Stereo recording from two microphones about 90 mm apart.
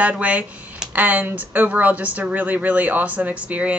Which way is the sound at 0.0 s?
15° right (ahead or behind).